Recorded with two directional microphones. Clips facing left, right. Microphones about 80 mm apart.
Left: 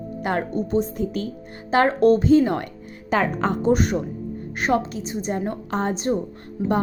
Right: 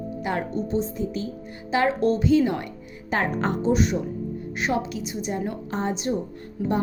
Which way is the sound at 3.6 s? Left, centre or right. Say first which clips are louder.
Left 2 dB; left.